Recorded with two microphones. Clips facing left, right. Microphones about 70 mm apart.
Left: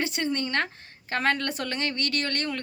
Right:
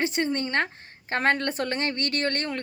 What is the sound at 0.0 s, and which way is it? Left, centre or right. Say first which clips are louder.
Speech: right 2 dB; right.